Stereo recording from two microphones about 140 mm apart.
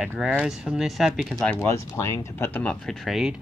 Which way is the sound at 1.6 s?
20° left (ahead or behind).